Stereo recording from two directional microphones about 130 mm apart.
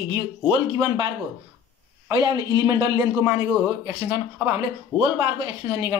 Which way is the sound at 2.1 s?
35° right (ahead or behind).